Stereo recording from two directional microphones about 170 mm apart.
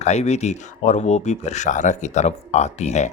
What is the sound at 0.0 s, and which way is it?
Speech, 40° left (ahead or behind).